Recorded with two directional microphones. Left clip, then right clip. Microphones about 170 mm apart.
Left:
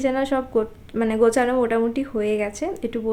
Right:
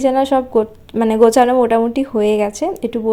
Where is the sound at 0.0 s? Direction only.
30° right (ahead or behind).